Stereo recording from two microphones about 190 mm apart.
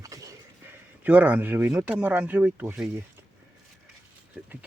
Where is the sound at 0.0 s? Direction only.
15° right (ahead or behind).